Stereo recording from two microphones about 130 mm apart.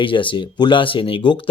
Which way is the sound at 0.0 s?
40° left (ahead or behind).